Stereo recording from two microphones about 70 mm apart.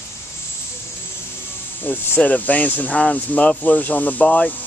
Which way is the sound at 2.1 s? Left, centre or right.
Left.